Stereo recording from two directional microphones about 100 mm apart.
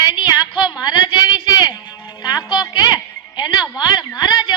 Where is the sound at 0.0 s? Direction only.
40° left (ahead or behind).